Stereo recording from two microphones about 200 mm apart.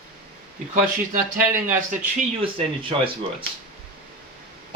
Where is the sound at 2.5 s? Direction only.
25° right (ahead or behind).